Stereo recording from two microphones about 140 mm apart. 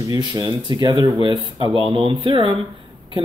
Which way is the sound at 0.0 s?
30° right (ahead or behind).